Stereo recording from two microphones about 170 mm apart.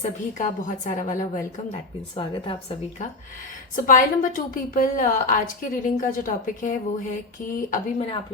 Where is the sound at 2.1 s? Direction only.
30° left (ahead or behind).